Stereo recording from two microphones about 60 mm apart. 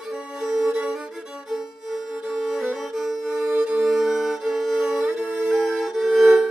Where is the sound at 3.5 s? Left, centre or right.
Centre.